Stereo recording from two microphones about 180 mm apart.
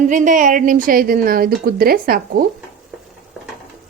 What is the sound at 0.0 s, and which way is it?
A woman's voice, 45° right (ahead or behind).